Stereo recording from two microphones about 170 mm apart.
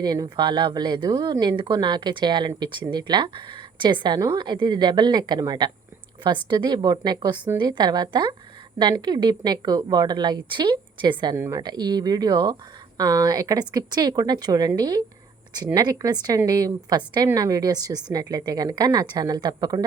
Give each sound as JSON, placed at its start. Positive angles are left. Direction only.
{"t": 0.0, "sound": "speech", "side_deg": -25}